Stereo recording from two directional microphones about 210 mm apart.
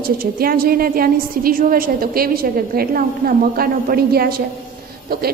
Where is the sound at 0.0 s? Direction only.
45° right (ahead or behind).